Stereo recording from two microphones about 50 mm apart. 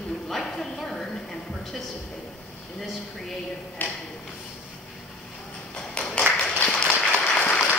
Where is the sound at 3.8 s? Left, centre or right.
Left.